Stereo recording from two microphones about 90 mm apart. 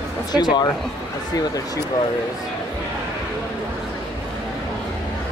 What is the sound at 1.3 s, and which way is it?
Speech, 45° left (ahead or behind).